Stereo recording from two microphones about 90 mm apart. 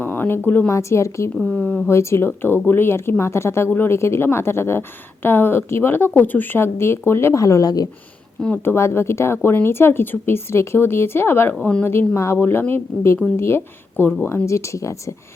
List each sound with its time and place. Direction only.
0.0 s a woman's voice: 25° left (ahead or behind)
1.4 s speech: 15° left (ahead or behind)
1.9 s a woman's voice: 30° left (ahead or behind)
8.6 s a woman's voice: 30° left (ahead or behind)